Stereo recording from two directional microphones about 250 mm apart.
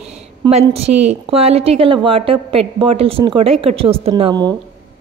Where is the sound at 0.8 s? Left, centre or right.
Right.